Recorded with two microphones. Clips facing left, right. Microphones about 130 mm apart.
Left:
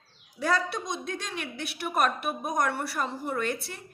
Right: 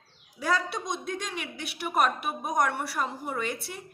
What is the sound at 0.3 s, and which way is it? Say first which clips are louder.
A woman's voice: left 1 dB; 10° right (ahead or behind).